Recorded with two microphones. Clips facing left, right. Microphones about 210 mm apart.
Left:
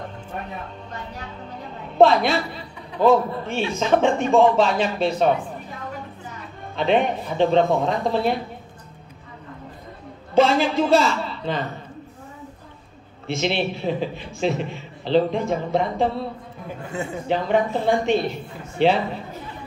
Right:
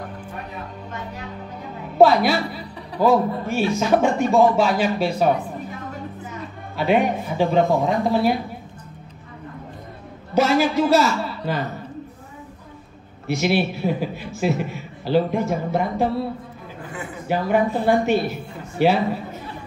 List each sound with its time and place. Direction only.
2.0 s a woman's voice: 5° right (ahead or behind)
6.8 s a man's voice: 5° right (ahead or behind)
10.3 s a man's voice: 5° right (ahead or behind)
13.4 s a man's voice: 5° right (ahead or behind)
16.9 s a man's voice: 25° left (ahead or behind)
17.3 s a man's voice: 5° right (ahead or behind)